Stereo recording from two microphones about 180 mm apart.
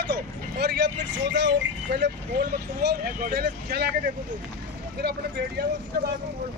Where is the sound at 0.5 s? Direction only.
70° right (ahead or behind).